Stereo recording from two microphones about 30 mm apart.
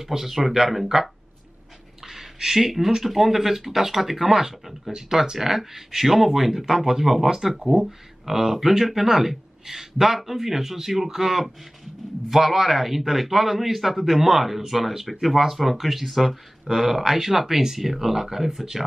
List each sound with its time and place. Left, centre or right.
0.0 s a man's voice: centre
2.0 s a sound: centre
3.0 s a man's voice: centre